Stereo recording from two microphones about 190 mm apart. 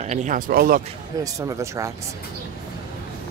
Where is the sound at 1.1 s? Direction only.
20° right (ahead or behind).